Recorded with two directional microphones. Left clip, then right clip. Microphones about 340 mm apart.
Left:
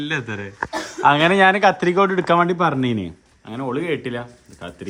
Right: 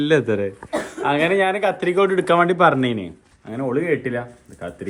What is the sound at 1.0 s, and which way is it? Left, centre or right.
Speech, centre.